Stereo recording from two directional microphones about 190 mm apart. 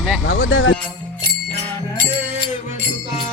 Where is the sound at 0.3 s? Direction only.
85° left.